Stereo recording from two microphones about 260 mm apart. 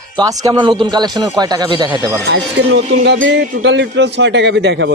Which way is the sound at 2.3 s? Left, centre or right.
Right.